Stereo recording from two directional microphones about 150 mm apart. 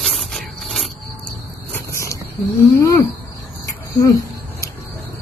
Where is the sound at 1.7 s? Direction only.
20° left (ahead or behind).